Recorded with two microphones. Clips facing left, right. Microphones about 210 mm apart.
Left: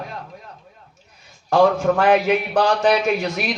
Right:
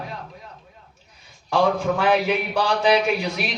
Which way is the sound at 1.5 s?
45° left (ahead or behind).